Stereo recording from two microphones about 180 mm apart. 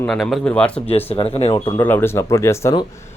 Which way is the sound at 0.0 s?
Centre (ahead or behind).